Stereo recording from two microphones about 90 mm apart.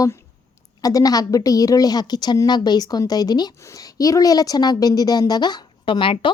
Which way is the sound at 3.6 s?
35° left (ahead or behind).